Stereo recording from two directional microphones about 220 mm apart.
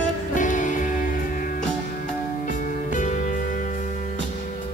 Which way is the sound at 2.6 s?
35° left (ahead or behind).